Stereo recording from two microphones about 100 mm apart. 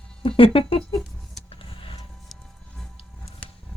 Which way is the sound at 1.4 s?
65° left (ahead or behind).